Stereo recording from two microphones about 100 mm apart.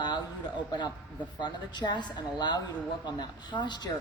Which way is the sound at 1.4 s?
45° left (ahead or behind).